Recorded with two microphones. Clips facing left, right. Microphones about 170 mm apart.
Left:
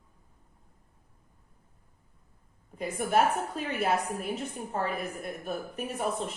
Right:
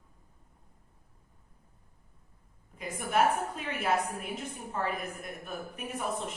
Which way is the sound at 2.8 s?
35° left (ahead or behind).